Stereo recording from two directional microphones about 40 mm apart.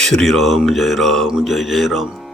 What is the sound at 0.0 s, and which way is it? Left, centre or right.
Mantra, centre.